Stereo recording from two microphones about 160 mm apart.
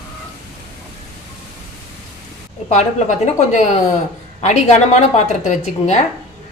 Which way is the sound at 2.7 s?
45° left (ahead or behind).